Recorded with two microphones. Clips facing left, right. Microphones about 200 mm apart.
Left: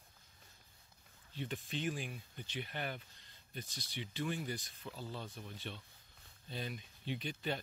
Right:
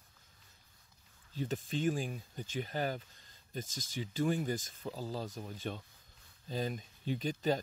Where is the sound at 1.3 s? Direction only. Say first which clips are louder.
Right 6 dB; 40° right (ahead or behind).